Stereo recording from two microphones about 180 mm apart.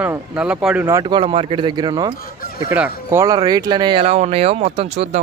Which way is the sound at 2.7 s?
10° right (ahead or behind).